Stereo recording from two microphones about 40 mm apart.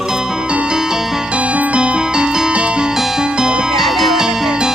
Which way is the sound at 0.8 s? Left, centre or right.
Centre.